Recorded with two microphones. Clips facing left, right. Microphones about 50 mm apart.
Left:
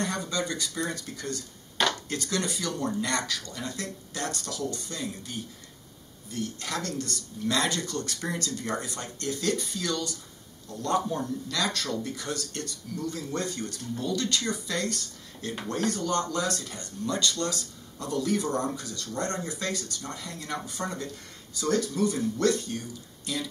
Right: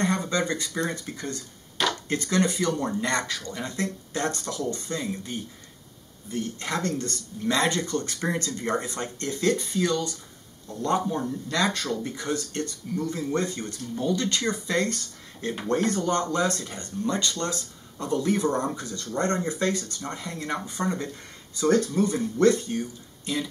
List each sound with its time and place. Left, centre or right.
0.0 s speech: right